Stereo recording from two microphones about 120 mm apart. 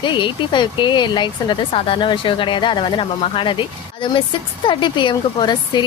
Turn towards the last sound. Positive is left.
turn(degrees=40)  # may be behind; listen again after turning